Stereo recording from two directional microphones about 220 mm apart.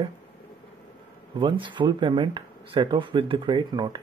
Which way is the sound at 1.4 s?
20° right (ahead or behind).